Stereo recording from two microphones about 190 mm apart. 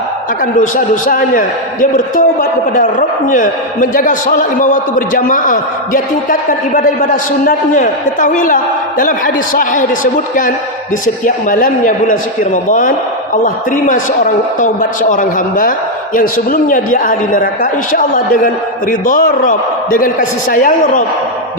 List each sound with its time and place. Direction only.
0.6 s a man's voice: 45° left (ahead or behind)